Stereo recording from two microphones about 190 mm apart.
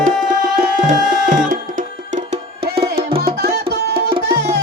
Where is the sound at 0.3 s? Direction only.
45° right (ahead or behind).